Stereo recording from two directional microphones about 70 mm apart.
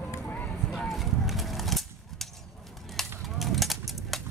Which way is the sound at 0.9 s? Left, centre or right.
Centre.